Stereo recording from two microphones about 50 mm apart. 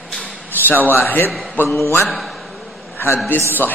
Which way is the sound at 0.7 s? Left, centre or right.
Left.